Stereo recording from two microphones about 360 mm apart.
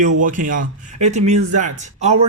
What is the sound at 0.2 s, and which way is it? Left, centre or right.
Speech, right.